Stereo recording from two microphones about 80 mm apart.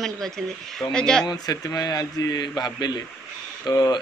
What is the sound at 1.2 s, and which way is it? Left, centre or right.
A man's voice, left.